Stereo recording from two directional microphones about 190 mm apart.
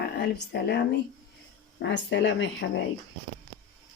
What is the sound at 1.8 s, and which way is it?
Speech, 70° left (ahead or behind).